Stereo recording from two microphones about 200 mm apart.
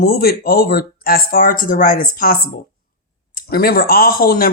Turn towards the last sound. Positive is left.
turn(degrees=50)  # may be behind; listen again after turning